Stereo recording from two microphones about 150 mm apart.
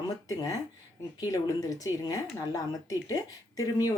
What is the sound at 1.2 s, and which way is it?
Speech, 20° left (ahead or behind).